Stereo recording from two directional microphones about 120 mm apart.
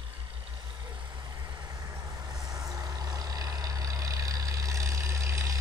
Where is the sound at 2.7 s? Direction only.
30° right (ahead or behind).